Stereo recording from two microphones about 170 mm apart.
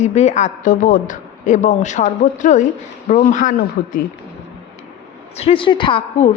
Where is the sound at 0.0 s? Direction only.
40° left (ahead or behind).